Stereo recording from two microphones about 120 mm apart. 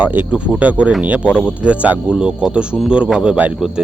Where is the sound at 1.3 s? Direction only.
15° left (ahead or behind).